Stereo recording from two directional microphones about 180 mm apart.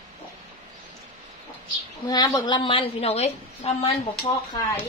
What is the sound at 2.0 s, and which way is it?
A woman's voice, 20° left (ahead or behind).